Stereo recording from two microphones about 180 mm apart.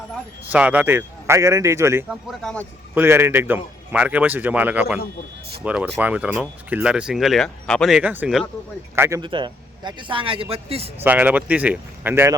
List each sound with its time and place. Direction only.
0.5 s speech: 10° right (ahead or behind)
2.0 s speech: centre (ahead or behind)
2.9 s speech: 10° right (ahead or behind)
9.0 s speech: 15° right (ahead or behind); by 10.9 s 35° right (ahead or behind)
11.0 s speech: 10° right (ahead or behind)